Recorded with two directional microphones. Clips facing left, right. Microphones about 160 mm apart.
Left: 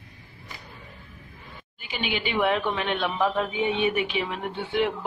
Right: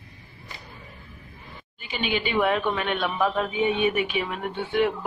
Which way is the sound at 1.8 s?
15° left (ahead or behind).